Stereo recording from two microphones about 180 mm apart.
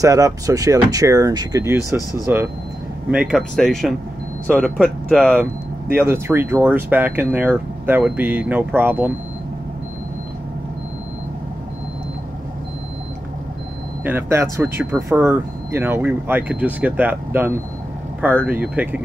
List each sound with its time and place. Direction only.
0.0 s speech: 20° right (ahead or behind); by 5.4 s 5° left (ahead or behind)
5.9 s speech: 15° right (ahead or behind)
14.0 s speech: 10° right (ahead or behind)